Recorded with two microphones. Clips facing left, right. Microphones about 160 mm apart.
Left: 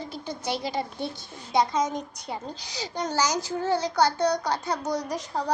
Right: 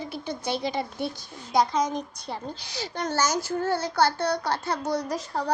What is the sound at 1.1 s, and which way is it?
A woman's voice, 25° left (ahead or behind).